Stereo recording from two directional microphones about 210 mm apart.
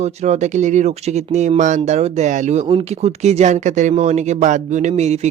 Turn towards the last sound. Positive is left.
turn(degrees=-30)  # may be behind; listen again after turning